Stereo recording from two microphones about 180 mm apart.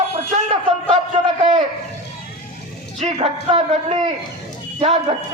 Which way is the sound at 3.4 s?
40° right (ahead or behind).